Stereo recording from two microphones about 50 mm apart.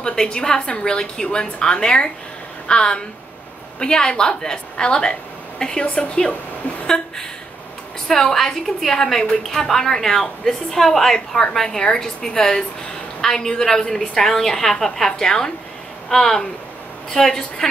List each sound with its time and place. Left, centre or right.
0.0 s a woman's voice: centre
8.1 s a woman's voice: centre